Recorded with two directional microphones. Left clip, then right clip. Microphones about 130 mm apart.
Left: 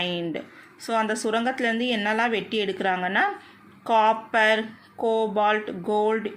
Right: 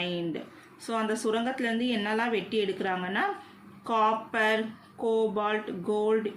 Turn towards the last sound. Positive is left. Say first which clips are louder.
# left 4 dB
turn(degrees=40)  # may be behind; listen again after turning